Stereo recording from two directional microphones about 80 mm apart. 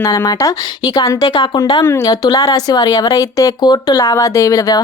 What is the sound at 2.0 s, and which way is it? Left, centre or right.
Speech, left.